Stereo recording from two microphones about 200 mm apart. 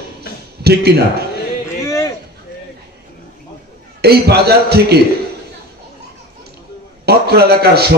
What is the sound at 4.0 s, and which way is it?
A man's voice, 55° right (ahead or behind).